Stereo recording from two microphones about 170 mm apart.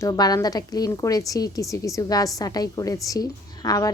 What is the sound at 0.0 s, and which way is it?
A woman's voice, 25° left (ahead or behind).